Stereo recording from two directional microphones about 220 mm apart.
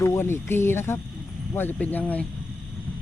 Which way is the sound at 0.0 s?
10° left (ahead or behind).